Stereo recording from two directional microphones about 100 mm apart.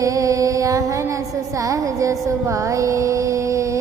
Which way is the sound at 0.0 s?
35° right (ahead or behind).